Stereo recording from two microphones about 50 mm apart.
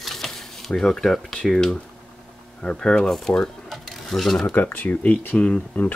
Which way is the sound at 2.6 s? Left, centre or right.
Centre.